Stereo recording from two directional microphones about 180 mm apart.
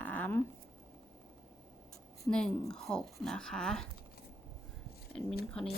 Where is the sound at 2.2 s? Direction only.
5° left (ahead or behind).